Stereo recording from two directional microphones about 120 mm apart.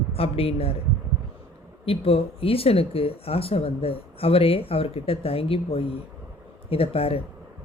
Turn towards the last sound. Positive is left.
turn(degrees=50)  # may be behind; listen again after turning